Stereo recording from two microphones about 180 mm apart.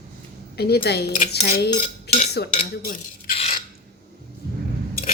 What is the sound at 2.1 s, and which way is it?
Cutlery, 65° left (ahead or behind).